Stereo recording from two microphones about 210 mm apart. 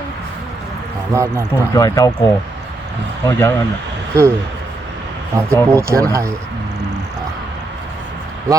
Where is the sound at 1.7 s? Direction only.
15° left (ahead or behind).